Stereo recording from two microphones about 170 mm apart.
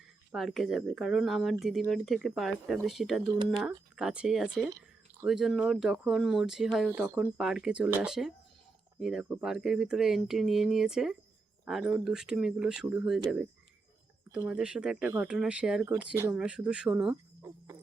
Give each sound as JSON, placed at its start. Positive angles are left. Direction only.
{"t": 0.3, "sound": "speech", "side_deg": 0}
{"t": 3.2, "sound": "speech", "side_deg": -25}
{"t": 3.9, "sound": "speech", "side_deg": -5}
{"t": 7.0, "sound": "speech", "side_deg": -10}